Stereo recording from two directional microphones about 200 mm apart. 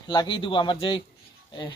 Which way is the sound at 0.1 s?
25° left (ahead or behind).